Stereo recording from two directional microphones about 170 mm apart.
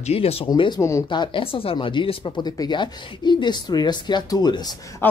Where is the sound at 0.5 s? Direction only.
25° left (ahead or behind).